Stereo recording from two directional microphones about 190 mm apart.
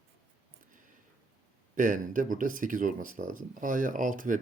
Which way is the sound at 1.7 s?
45° right (ahead or behind).